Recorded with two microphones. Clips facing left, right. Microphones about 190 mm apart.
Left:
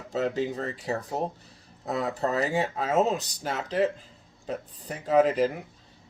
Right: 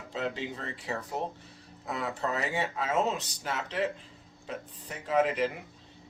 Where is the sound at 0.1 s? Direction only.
40° left (ahead or behind).